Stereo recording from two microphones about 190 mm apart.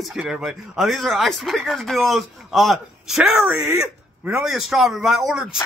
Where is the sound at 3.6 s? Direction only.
15° right (ahead or behind).